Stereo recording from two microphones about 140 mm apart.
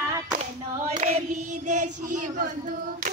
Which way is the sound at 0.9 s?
60° right (ahead or behind).